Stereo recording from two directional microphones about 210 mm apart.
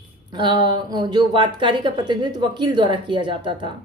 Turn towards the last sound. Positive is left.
turn(degrees=-20)  # may be behind; listen again after turning